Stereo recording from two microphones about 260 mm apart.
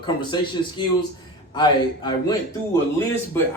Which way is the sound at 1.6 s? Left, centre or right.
Centre.